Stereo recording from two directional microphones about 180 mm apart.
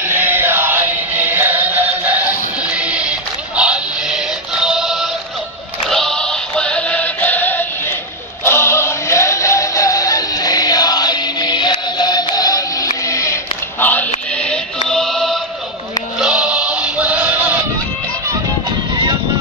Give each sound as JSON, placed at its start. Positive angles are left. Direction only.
{"t": 0.0, "sound": "music", "side_deg": -10}
{"t": 5.9, "sound": "synthetic singing", "side_deg": 5}
{"t": 8.5, "sound": "music", "side_deg": 15}